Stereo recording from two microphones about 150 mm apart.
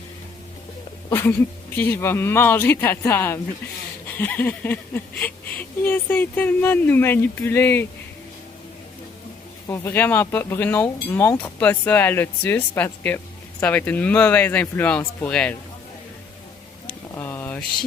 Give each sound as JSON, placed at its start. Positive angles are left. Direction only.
{"t": 1.7, "sound": "speech", "side_deg": 15}
{"t": 9.6, "sound": "speech", "side_deg": 15}
{"t": 17.2, "sound": "a sound", "side_deg": 10}